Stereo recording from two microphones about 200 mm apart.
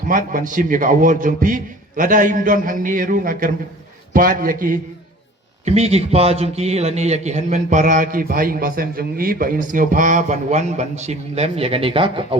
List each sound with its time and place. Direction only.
0.1 s a man's voice: 40° right (ahead or behind)
5.6 s a man's voice: 30° right (ahead or behind)